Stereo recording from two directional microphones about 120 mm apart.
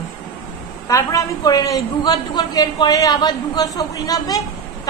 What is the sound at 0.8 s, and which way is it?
A woman's voice, 25° left (ahead or behind).